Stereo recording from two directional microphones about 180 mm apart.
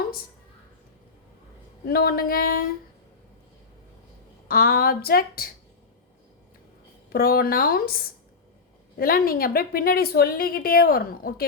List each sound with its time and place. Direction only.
1.8 s a woman's voice: 60° left (ahead or behind)
4.4 s a woman's voice: 55° left (ahead or behind)
7.1 s a woman's voice: 55° left (ahead or behind)